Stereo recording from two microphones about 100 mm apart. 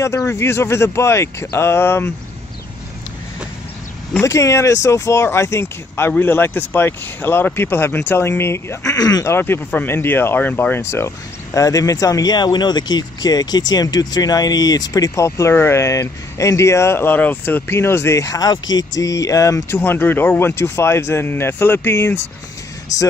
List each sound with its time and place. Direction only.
0.0 s speech: 30° left (ahead or behind)
4.2 s speech: 30° left (ahead or behind)
8.9 s speech: 40° left (ahead or behind)
9.3 s speech: 20° left (ahead or behind)
19.8 s speech: 20° left (ahead or behind)